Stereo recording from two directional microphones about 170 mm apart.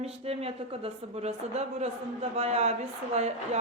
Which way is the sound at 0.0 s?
35° right (ahead or behind).